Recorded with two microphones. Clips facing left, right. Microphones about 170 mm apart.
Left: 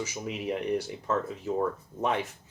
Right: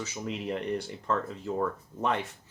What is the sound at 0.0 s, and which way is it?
Speech, 10° left (ahead or behind).